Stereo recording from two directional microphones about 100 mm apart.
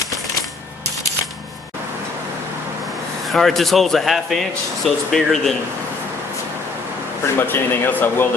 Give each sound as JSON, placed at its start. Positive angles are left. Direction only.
{"t": 3.2, "sound": "speech", "side_deg": 0}
{"t": 7.3, "sound": "speech", "side_deg": 20}